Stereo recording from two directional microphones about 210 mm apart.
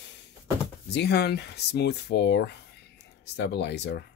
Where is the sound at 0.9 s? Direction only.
50° left (ahead or behind).